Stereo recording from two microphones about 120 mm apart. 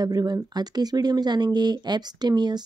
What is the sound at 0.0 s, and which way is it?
Speech, 35° right (ahead or behind).